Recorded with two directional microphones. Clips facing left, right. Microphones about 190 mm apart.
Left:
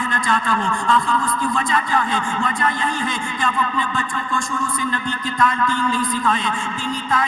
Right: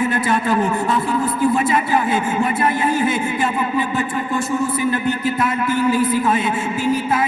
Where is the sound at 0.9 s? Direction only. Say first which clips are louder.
Right 1 dB; 10° right (ahead or behind).